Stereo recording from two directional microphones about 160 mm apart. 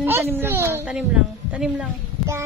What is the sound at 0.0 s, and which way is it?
A child's voice, 15° right (ahead or behind).